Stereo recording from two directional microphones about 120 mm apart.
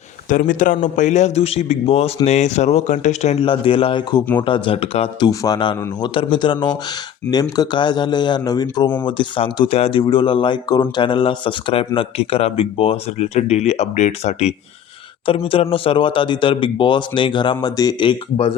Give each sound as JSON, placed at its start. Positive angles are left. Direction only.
{"t": 0.3, "sound": "speech", "side_deg": 90}
{"t": 3.4, "sound": "speech", "side_deg": 45}
{"t": 5.2, "sound": "speech", "side_deg": 30}
{"t": 9.0, "sound": "speech", "side_deg": 45}
{"t": 10.0, "sound": "speech", "side_deg": 40}
{"t": 15.3, "sound": "speech", "side_deg": 50}